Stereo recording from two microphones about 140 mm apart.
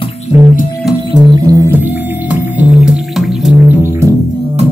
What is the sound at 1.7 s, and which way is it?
Music, 15° right (ahead or behind).